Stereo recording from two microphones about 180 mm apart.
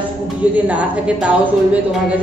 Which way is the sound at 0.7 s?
10° right (ahead or behind).